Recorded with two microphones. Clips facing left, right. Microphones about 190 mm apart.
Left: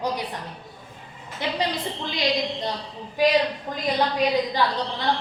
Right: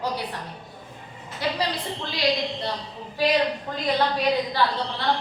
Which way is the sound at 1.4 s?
20° left (ahead or behind).